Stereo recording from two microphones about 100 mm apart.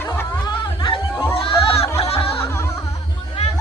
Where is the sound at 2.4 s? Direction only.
25° left (ahead or behind).